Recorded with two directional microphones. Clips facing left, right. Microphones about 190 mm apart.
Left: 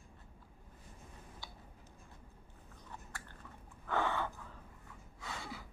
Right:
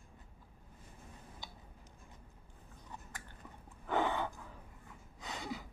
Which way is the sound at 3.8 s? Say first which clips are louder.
Right 2 dB; 15° right (ahead or behind).